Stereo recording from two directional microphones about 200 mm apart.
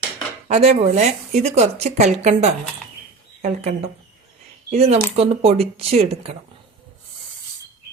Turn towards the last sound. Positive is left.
turn(degrees=-30)  # may be behind; listen again after turning